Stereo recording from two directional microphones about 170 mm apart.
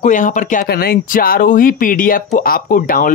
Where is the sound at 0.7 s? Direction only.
65° left (ahead or behind).